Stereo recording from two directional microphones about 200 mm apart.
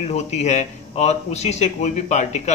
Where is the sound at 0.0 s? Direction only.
35° left (ahead or behind).